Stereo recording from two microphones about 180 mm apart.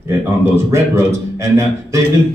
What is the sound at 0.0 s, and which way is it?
A man's voice, 15° right (ahead or behind).